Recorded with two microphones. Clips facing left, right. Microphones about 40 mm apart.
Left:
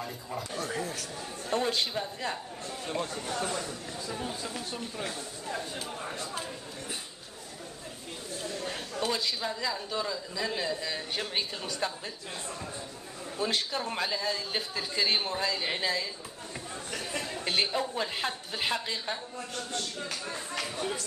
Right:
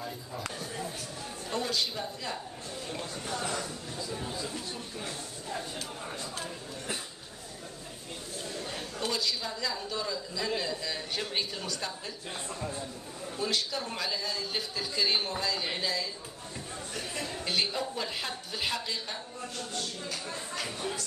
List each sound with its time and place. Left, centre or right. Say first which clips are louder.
0.6 s chatter: left 4 dB; left
1.5 s a man's voice: left 3 dB; left
9.1 s a man's voice: left 1 dB; left
11.6 s a woman's voice: left 3 dB; left
13.4 s a man's voice: left 1 dB; left
17.2 s a sound: left 1 dB; left
17.7 s a man's voice: left 3 dB; centre
18.1 s a woman's voice: left 3 dB; left